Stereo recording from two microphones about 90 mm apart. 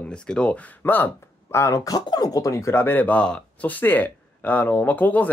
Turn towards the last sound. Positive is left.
turn(degrees=20)  # may be behind; listen again after turning